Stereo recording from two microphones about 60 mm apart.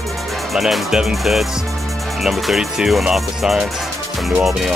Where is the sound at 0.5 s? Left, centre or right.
Centre.